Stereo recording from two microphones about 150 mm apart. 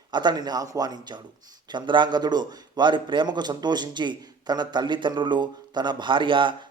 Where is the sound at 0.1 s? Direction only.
30° right (ahead or behind).